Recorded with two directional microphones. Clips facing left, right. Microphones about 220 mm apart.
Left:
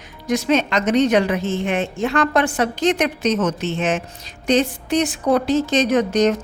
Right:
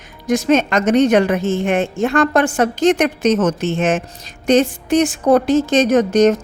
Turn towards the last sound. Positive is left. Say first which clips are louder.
# right 4 dB
turn(degrees=-45)  # may be behind; listen again after turning